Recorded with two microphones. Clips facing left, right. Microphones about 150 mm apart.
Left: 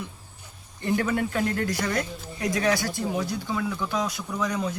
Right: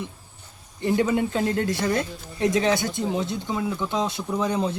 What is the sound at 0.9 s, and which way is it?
Speech, 20° right (ahead or behind).